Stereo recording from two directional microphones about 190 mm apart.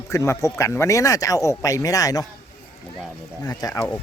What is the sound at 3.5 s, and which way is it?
Speech, 20° left (ahead or behind).